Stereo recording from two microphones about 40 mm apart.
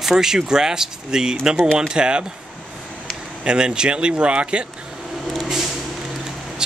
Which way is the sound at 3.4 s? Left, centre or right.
Right.